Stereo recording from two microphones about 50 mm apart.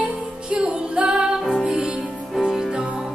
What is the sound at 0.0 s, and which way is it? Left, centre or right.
Music, right.